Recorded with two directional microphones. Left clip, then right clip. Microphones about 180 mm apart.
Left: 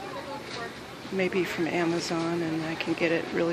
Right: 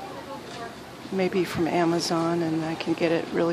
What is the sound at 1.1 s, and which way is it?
Speech, 15° right (ahead or behind).